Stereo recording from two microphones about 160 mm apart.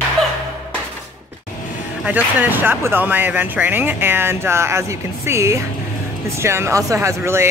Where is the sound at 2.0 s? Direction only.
10° right (ahead or behind).